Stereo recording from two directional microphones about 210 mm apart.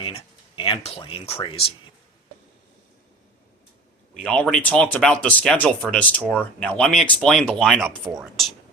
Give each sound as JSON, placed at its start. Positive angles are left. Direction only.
{"t": 0.0, "sound": "a sound", "side_deg": 25}
{"t": 0.9, "sound": "speech", "side_deg": 25}
{"t": 4.1, "sound": "speech", "side_deg": 5}